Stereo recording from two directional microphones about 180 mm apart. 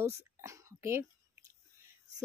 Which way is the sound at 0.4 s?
15° right (ahead or behind).